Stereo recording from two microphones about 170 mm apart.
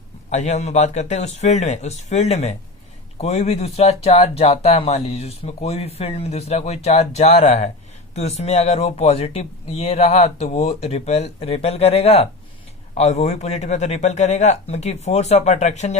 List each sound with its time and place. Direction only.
0.3 s speech: 45° left (ahead or behind)